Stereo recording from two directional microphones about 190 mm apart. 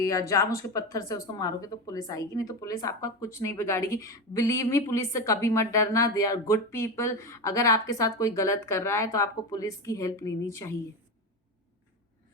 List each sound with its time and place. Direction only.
0.0 s speech: 15° left (ahead or behind)